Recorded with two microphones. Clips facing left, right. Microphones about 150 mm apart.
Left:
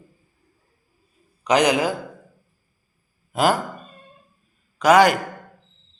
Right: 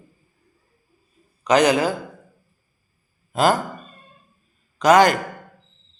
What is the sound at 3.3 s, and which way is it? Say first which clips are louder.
Speech: right 1 dB; 10° left (ahead or behind).